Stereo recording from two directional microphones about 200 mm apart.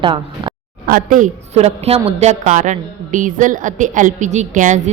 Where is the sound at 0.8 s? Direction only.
45° right (ahead or behind).